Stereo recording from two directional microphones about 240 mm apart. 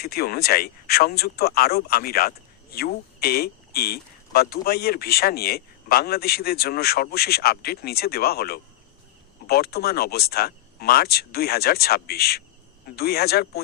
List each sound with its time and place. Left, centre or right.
0.0 s speech: left